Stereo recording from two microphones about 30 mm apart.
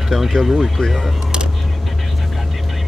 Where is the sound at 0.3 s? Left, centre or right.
Centre.